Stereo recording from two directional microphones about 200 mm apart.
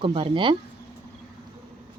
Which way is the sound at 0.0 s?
25° right (ahead or behind).